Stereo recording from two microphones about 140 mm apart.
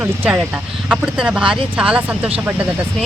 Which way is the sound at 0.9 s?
5° right (ahead or behind).